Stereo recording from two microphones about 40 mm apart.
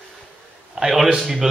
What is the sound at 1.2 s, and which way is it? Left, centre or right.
Speech, centre.